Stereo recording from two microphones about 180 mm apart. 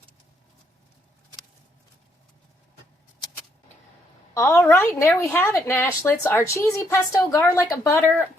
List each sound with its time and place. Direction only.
4.4 s a woman's voice: 15° left (ahead or behind)